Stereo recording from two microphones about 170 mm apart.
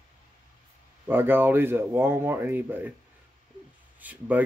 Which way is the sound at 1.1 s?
15° right (ahead or behind).